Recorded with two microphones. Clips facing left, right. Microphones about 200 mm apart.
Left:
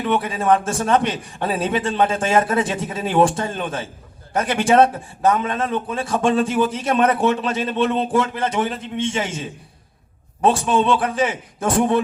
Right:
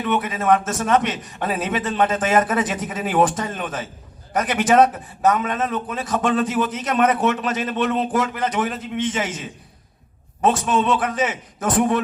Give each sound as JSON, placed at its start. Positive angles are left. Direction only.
{"t": 0.0, "sound": "a man's voice", "side_deg": 30}